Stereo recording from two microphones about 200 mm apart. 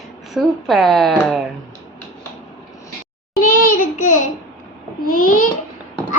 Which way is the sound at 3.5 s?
45° left (ahead or behind).